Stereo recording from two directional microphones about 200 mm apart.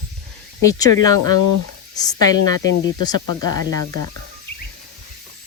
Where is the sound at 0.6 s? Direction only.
15° left (ahead or behind).